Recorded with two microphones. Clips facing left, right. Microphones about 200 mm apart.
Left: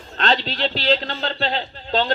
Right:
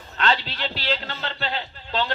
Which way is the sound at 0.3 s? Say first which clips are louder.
Left 4 dB; 35° left (ahead or behind).